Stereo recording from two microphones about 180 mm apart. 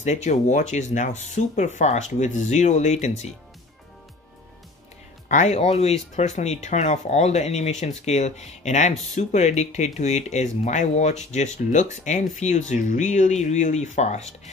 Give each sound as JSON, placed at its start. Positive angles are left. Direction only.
{"t": 0.0, "sound": "speech", "side_deg": 40}
{"t": 5.3, "sound": "speech", "side_deg": 40}